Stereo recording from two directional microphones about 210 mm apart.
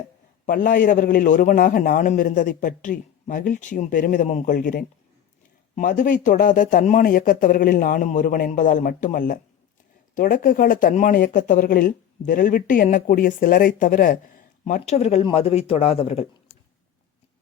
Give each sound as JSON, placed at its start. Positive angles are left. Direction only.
{"t": 0.4, "sound": "speech", "side_deg": 40}